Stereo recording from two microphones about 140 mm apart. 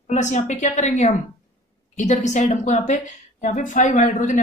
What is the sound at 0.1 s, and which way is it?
A woman's voice, 60° left (ahead or behind).